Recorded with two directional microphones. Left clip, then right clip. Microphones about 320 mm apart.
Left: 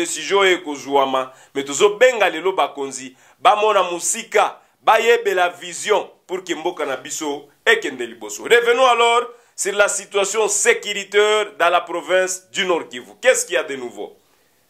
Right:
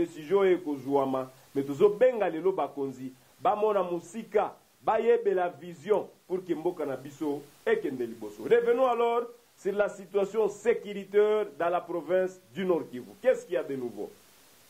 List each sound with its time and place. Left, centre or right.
0.0 s speech: centre
8.2 s a man's voice: left
8.5 s speech: centre